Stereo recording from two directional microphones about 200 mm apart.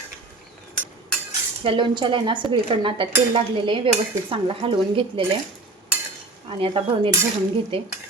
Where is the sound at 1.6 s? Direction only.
25° right (ahead or behind).